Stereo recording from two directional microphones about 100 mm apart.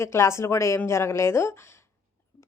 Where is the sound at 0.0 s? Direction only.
30° left (ahead or behind).